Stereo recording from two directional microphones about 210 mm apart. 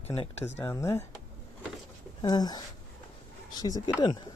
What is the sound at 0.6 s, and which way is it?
Speech, 15° left (ahead or behind).